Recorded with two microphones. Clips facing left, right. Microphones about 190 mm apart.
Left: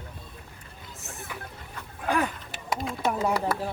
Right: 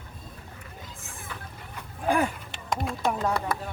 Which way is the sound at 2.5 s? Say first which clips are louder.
Right 1 dB; 5° left (ahead or behind).